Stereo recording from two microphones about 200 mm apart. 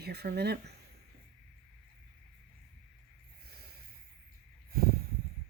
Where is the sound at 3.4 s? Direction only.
50° right (ahead or behind).